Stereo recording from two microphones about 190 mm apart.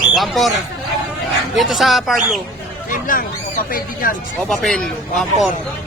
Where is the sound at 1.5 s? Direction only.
Centre (ahead or behind).